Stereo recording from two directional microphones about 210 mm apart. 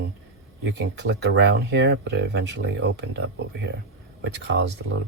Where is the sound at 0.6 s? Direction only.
55° right (ahead or behind).